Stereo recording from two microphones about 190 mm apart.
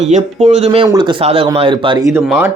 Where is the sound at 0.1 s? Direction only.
35° right (ahead or behind).